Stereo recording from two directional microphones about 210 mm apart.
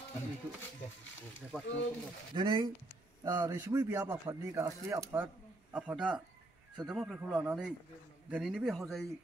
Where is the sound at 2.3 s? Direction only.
20° right (ahead or behind).